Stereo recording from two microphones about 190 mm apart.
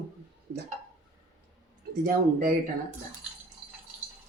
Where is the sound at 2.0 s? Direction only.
50° right (ahead or behind).